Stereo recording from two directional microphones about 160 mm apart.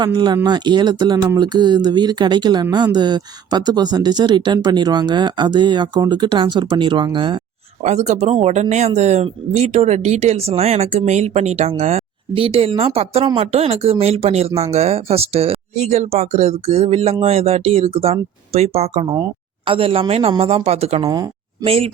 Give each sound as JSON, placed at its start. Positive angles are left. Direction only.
{"t": 0.0, "sound": "speech", "side_deg": -25}
{"t": 7.8, "sound": "speech", "side_deg": -45}
{"t": 19.1, "sound": "speech", "side_deg": -30}
{"t": 21.1, "sound": "speech", "side_deg": -30}